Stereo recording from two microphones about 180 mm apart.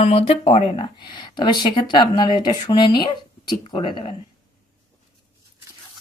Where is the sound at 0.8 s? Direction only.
25° left (ahead or behind).